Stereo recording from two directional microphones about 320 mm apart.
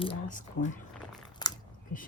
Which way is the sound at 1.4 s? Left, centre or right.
Centre.